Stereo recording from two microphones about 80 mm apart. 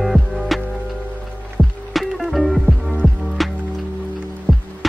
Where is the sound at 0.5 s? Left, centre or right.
Centre.